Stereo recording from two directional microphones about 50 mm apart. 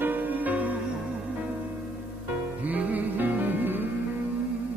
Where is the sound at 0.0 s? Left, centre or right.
Right.